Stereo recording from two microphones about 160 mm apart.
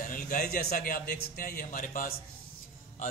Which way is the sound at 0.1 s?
60° left (ahead or behind).